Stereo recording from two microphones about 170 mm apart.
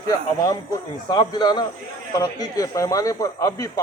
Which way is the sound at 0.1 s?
20° left (ahead or behind).